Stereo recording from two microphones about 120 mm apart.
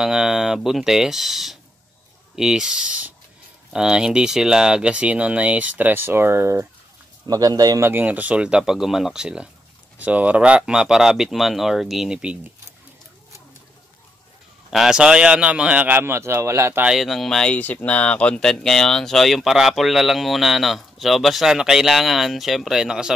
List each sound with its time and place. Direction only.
0.0 s speech: 5° right (ahead or behind); by 6.7 s 20° right (ahead or behind)
7.2 s speech: 30° right (ahead or behind)
7.8 s speech: 15° right (ahead or behind)
14.7 s speech: 5° right (ahead or behind); by 16.8 s 20° right (ahead or behind)
16.8 s speech: centre (ahead or behind)